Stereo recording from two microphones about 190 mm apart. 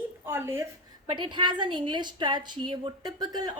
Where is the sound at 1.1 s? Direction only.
25° right (ahead or behind).